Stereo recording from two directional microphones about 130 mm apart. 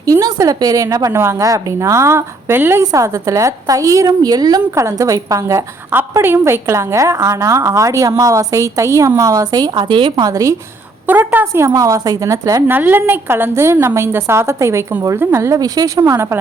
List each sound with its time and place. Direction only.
0.0 s a woman's voice: 30° right (ahead or behind)
11.0 s a woman's voice: 15° right (ahead or behind)
12.7 s a woman's voice: 15° right (ahead or behind)